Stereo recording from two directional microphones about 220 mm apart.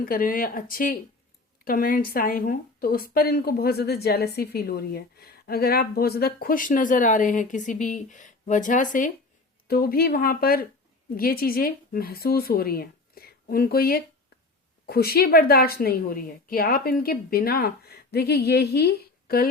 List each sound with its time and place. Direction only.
0.0 s a woman's voice: 40° left (ahead or behind)